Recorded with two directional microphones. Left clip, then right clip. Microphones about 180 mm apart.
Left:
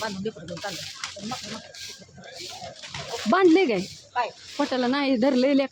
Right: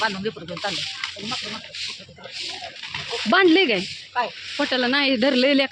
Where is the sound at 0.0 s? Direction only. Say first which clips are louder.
Right 7 dB; 25° right (ahead or behind).